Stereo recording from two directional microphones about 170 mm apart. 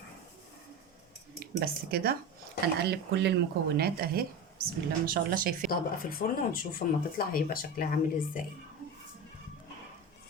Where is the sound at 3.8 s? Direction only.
60° right (ahead or behind).